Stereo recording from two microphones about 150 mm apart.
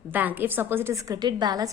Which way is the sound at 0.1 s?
10° right (ahead or behind).